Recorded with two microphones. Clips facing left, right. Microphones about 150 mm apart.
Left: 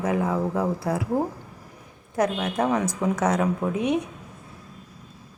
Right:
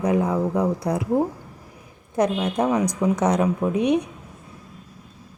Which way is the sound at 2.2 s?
20° right (ahead or behind).